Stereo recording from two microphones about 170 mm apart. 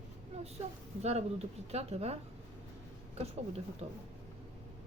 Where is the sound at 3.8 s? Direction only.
40° right (ahead or behind).